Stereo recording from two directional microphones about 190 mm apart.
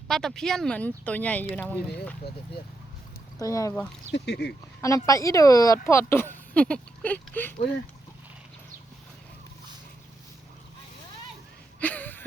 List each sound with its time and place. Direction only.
0.1 s speech: centre (ahead or behind)
3.4 s speech: 15° left (ahead or behind)
4.1 s speech: 60° left (ahead or behind)
4.8 s speech: 15° left (ahead or behind)
11.8 s a sound: 10° left (ahead or behind)